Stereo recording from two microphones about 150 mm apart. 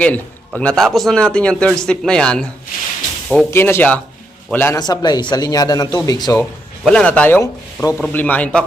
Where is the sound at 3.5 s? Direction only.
15° left (ahead or behind).